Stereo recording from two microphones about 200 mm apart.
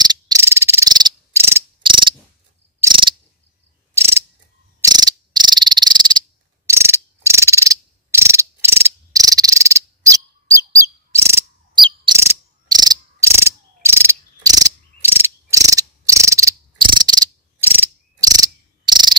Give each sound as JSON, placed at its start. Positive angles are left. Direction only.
{"t": 0.0, "sound": "cricket", "side_deg": -20}
{"t": 1.8, "sound": "insect", "side_deg": -25}
{"t": 2.8, "sound": "cricket", "side_deg": -25}
{"t": 4.9, "sound": "frog", "side_deg": -20}
{"t": 12.2, "sound": "cricket", "side_deg": -20}